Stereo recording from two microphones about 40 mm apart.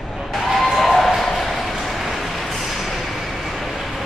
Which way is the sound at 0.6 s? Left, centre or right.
Centre.